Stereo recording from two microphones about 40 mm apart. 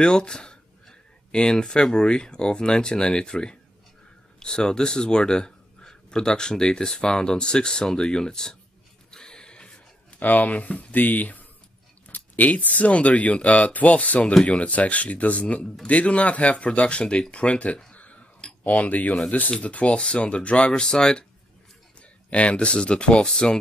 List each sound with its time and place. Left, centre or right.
0.0 s speech: left
9.1 s a sound: centre
10.2 s speech: left
10.9 s speech: left
17.9 s a sound: left
18.6 s speech: left
22.3 s speech: left